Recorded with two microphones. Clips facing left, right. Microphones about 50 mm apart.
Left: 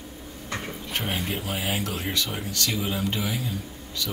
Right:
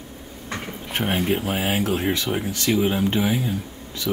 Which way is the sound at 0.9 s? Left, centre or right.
Right.